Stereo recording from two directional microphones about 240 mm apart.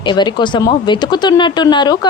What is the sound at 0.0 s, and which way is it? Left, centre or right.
Speech, centre.